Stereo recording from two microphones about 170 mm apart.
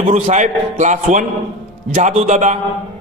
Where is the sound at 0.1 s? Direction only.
45° right (ahead or behind).